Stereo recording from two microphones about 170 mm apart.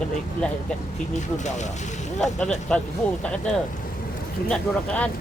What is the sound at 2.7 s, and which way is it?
Speech, 5° left (ahead or behind).